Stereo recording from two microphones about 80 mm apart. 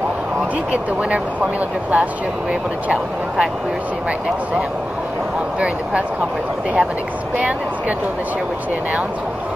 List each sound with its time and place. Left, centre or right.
1.1 s speech: centre